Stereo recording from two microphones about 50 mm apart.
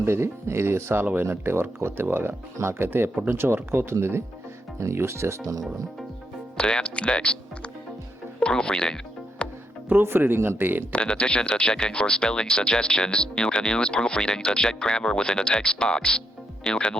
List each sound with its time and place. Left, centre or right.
0.0 s speech: right
6.6 s speech: centre
9.4 s music: left
9.9 s speech: right
10.9 s speech: left